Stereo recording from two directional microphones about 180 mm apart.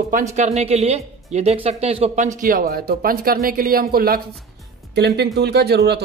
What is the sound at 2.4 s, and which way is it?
Speech, 55° right (ahead or behind).